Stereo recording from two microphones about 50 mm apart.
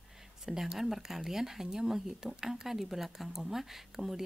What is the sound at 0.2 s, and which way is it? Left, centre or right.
A woman's voice, centre.